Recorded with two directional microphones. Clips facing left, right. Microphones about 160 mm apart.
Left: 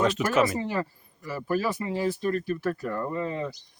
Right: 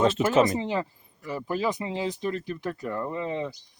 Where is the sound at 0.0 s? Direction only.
25° right (ahead or behind).